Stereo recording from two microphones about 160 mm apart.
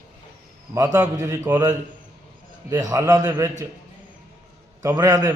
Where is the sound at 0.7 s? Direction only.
20° right (ahead or behind).